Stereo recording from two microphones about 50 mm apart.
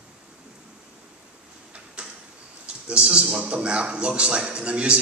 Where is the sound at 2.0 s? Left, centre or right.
Right.